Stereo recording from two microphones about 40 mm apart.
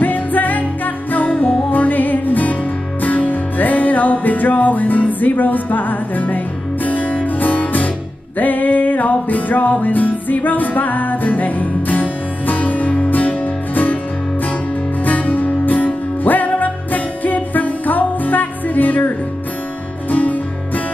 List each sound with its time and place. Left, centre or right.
0.0 s music: left
15.0 s music: left